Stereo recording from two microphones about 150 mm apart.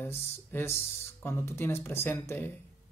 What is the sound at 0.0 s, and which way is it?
Speech, 15° left (ahead or behind).